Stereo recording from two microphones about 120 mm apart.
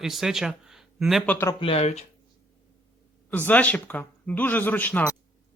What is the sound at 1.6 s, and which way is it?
Speech, 55° left (ahead or behind).